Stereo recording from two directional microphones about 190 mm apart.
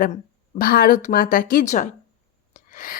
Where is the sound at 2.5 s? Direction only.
45° left (ahead or behind).